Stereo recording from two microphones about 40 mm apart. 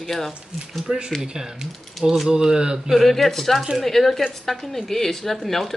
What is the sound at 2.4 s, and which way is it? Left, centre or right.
Speech, centre.